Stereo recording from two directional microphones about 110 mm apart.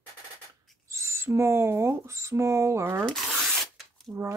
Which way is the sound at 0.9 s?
25° right (ahead or behind).